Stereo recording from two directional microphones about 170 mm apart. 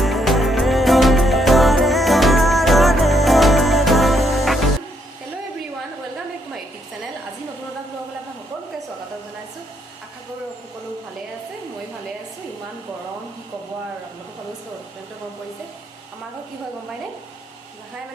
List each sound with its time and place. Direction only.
0.0 s music: centre (ahead or behind)